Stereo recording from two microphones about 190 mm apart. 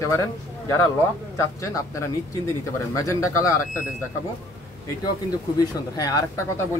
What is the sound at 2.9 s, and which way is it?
Speech, 15° left (ahead or behind).